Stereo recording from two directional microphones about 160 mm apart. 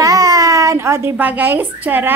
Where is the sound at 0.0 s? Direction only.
25° right (ahead or behind).